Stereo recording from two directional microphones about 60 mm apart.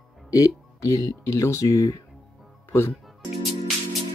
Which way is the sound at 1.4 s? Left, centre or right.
Left.